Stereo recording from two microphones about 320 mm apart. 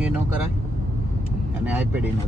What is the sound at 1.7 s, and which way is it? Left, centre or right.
Speech, centre.